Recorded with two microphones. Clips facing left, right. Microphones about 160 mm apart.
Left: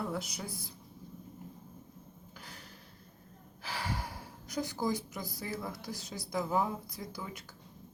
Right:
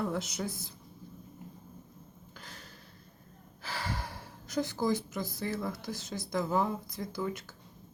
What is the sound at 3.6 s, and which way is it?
A woman's voice, 15° left (ahead or behind).